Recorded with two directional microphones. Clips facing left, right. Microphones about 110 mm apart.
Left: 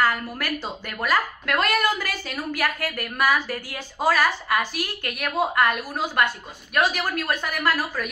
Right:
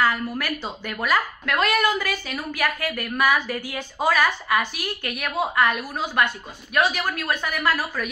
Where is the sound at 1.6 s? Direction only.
40° left (ahead or behind).